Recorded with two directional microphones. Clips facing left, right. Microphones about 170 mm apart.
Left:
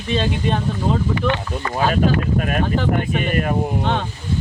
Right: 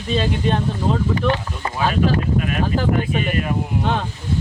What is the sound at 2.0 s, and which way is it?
Speech, 45° left (ahead or behind).